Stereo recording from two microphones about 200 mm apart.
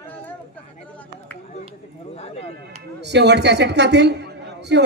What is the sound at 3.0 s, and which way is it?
A man's voice, 60° right (ahead or behind).